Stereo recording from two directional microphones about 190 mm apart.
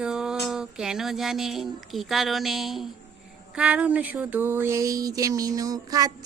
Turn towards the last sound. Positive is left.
turn(degrees=-20)  # may be behind; listen again after turning